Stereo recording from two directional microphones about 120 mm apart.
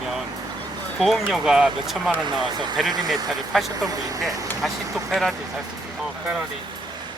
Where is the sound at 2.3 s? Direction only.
40° right (ahead or behind).